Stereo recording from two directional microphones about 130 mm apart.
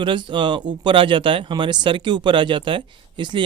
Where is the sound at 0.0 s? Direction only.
40° right (ahead or behind).